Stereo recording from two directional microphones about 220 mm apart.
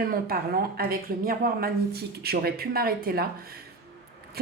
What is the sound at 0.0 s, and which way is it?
A woman's voice, 40° right (ahead or behind).